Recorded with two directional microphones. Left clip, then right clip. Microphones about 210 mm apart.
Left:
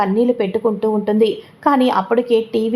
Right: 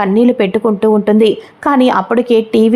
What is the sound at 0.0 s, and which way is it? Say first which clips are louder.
A woman's voice: right 5 dB; 25° right (ahead or behind).